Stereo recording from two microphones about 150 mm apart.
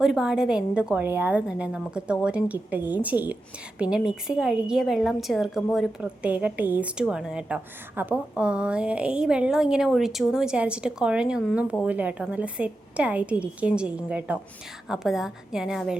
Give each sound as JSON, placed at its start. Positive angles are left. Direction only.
{"t": 0.0, "sound": "a woman's voice", "side_deg": -5}